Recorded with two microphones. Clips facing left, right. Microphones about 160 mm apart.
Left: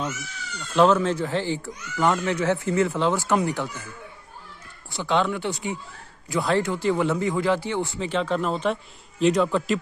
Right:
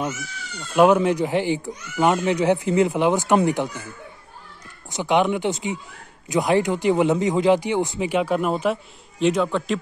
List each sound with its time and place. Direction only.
0.7 s speech: 15° right (ahead or behind)
4.8 s a man's voice: 15° right (ahead or behind); by 9.8 s centre (ahead or behind)